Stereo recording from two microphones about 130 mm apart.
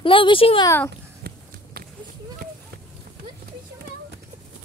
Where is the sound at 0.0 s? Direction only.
40° left (ahead or behind).